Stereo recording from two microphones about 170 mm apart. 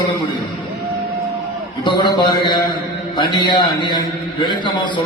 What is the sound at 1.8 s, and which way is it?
A man's voice, 25° left (ahead or behind).